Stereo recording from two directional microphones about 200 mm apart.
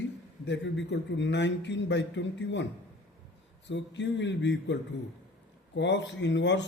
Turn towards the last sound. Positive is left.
turn(degrees=65)  # may be behind; listen again after turning